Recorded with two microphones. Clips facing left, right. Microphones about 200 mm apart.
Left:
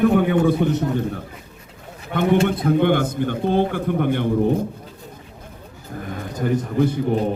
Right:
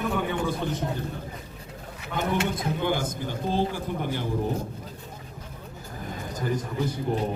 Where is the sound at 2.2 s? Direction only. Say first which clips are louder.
Left 9 dB; 60° left (ahead or behind).